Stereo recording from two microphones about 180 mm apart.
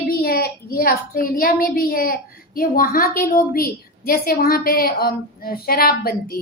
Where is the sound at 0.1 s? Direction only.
55° left (ahead or behind).